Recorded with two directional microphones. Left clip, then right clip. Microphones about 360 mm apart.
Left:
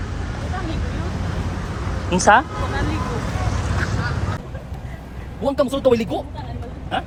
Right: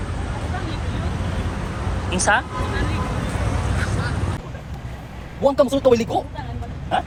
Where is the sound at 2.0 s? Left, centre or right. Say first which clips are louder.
Left 5 dB; centre.